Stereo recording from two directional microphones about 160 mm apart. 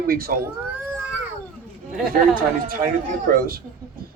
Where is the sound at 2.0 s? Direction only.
60° right (ahead or behind).